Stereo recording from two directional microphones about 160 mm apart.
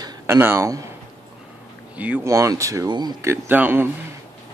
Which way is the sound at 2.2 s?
20° right (ahead or behind).